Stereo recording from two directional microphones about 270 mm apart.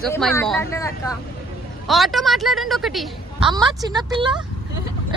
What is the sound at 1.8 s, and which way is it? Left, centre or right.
A woman's voice, centre.